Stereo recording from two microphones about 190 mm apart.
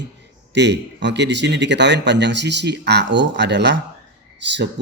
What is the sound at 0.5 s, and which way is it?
Speech, 65° right (ahead or behind).